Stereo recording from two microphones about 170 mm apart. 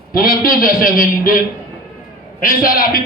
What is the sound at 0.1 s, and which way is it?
A man's voice, 60° left (ahead or behind).